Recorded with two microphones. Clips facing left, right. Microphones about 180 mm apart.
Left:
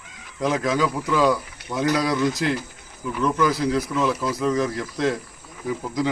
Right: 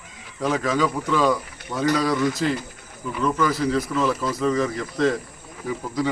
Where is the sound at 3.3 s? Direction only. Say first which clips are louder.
Left 1 dB; 10° left (ahead or behind).